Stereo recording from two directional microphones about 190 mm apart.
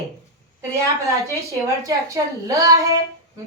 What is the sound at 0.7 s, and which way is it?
A woman's voice, 15° right (ahead or behind).